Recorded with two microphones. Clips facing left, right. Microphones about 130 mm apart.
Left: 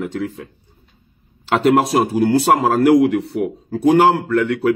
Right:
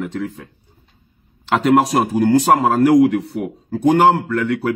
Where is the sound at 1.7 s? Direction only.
Centre (ahead or behind).